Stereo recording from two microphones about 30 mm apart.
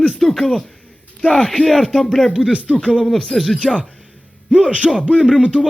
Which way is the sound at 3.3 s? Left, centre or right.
Left.